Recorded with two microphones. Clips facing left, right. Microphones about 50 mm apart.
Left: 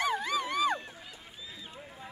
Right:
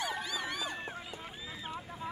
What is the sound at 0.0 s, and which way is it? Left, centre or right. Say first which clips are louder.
Dog: left 6 dB; left.